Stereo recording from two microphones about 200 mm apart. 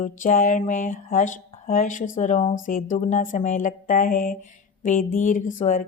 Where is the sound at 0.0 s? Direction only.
40° left (ahead or behind).